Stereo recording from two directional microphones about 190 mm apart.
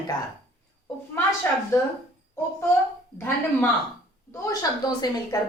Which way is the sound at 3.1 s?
15° left (ahead or behind).